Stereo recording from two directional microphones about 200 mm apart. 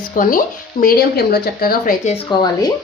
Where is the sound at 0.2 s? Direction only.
45° left (ahead or behind).